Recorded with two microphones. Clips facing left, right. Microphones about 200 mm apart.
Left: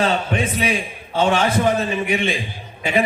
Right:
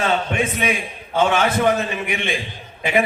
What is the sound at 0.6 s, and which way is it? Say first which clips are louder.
Speech: left 1 dB; 30° left (ahead or behind).